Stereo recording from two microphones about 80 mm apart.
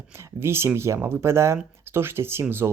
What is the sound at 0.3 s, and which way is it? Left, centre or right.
Speech, right.